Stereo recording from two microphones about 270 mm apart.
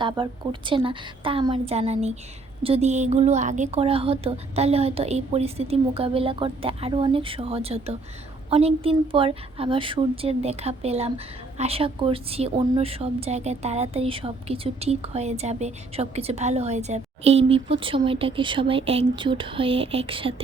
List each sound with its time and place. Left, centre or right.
0.0 s a woman's voice: centre